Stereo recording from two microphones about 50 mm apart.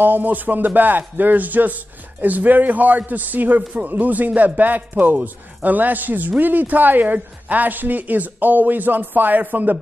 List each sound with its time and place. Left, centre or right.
0.0 s a man's voice: right